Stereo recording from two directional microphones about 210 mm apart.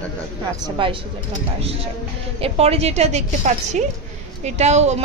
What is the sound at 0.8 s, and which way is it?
Speech, 25° right (ahead or behind).